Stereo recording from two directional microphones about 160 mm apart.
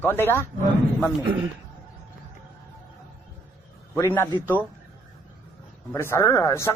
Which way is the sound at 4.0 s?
15° left (ahead or behind).